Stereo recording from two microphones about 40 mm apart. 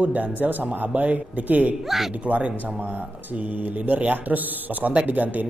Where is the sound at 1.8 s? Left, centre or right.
Centre.